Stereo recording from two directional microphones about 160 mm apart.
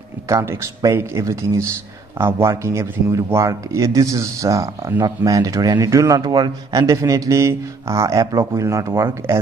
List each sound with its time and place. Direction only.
0.3 s speech: 20° right (ahead or behind)